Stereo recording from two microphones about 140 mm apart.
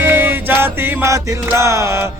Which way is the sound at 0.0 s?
15° right (ahead or behind).